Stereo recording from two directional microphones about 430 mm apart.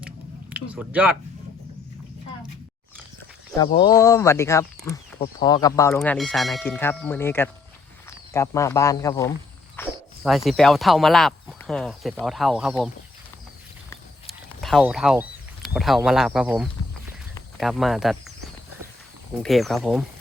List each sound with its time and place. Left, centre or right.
0.5 s speech: centre
3.6 s speech: centre
13.9 s a sound: centre
17.6 s speech: centre
19.4 s speech: centre